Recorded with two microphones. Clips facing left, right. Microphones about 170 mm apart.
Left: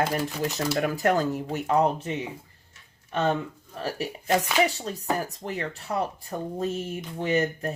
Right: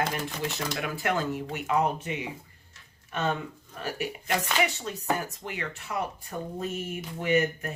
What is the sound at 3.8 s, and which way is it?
Speech, 35° left (ahead or behind).